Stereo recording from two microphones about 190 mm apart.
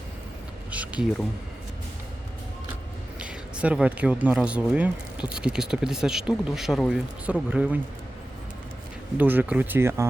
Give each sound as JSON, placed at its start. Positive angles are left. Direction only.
{"t": 3.2, "sound": "speech", "side_deg": -5}
{"t": 9.1, "sound": "speech", "side_deg": -10}